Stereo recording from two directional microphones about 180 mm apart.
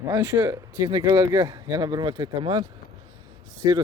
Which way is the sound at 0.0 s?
15° right (ahead or behind).